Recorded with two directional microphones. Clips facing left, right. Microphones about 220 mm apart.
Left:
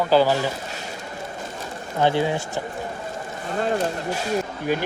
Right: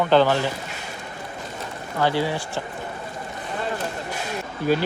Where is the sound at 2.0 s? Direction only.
20° left (ahead or behind).